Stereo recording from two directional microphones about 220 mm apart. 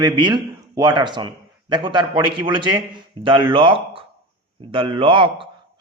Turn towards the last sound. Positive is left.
turn(degrees=-20)  # may be behind; listen again after turning